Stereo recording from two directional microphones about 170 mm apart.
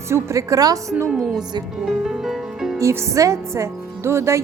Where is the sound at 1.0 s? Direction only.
Centre (ahead or behind).